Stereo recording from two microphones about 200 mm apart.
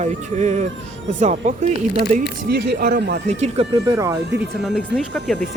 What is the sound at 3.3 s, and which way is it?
Speech, 35° right (ahead or behind).